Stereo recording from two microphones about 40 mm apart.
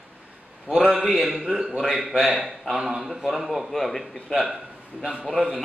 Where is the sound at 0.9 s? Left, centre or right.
Centre.